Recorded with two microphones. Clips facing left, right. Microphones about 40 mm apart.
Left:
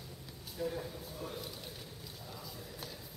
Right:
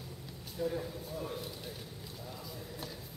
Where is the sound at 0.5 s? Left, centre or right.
Centre.